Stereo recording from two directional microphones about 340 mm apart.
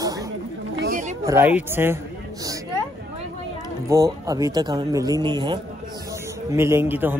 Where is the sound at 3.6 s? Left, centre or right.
Centre.